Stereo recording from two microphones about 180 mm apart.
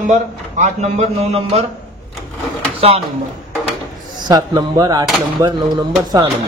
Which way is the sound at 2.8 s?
35° right (ahead or behind).